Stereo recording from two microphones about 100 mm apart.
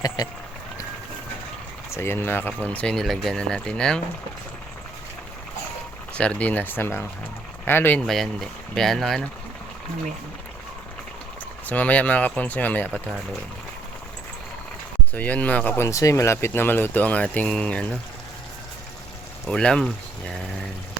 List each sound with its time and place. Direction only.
1.9 s speech: 25° left (ahead or behind); by 4.0 s 10° left (ahead or behind)
6.1 s speech: 10° left (ahead or behind)
8.0 s speech: centre (ahead or behind)
11.6 s speech: 15° left (ahead or behind)
15.1 s speech: 15° left (ahead or behind)
19.5 s speech: 10° left (ahead or behind)